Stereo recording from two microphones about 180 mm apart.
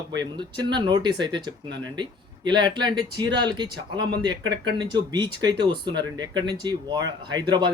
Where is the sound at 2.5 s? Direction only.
25° right (ahead or behind).